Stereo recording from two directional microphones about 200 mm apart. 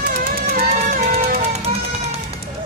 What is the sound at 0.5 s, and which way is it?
Music, 50° right (ahead or behind).